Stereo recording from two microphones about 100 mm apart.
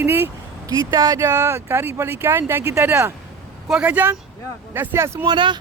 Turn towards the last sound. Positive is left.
turn(degrees=-50)  # may be behind; listen again after turning